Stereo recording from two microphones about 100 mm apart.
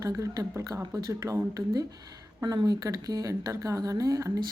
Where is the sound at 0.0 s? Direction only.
35° right (ahead or behind).